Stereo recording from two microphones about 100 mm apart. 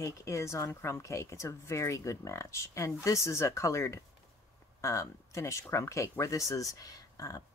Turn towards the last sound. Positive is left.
turn(degrees=35)  # may be behind; listen again after turning